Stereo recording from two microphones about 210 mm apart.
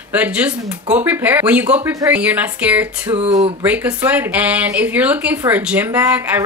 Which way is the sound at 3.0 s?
30° right (ahead or behind).